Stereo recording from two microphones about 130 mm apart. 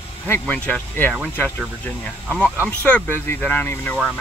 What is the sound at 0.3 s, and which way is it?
Speech, 15° left (ahead or behind).